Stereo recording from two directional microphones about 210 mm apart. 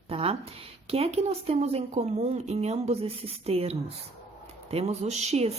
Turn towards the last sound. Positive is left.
turn(degrees=-30)  # may be behind; listen again after turning